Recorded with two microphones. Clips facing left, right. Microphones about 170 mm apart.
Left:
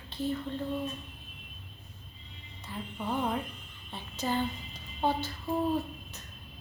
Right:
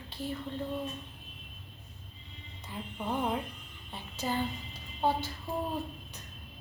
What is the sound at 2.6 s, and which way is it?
A woman's voice, 15° right (ahead or behind).